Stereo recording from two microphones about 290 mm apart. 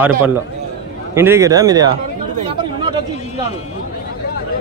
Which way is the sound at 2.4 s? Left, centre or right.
Centre.